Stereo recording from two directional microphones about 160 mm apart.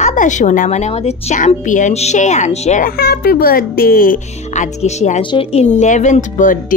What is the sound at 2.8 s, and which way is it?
Speech, 75° left (ahead or behind).